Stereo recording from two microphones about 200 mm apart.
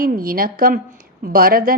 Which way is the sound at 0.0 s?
45° right (ahead or behind).